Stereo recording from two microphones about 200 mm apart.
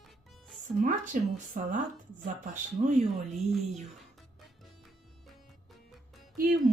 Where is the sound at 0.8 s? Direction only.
40° right (ahead or behind).